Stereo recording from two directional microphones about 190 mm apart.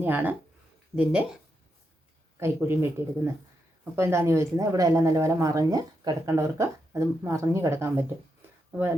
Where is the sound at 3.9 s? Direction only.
15° right (ahead or behind).